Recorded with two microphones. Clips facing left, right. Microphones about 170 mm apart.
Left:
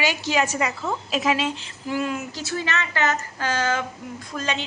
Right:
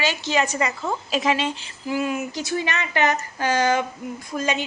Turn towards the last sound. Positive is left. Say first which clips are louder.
# right 3 dB
turn(degrees=-10)  # may be behind; listen again after turning